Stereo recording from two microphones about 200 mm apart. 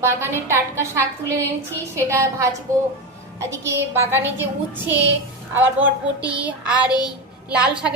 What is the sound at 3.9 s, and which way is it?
Speech, 10° right (ahead or behind).